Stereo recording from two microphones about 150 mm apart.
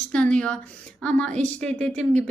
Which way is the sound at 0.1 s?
5° left (ahead or behind).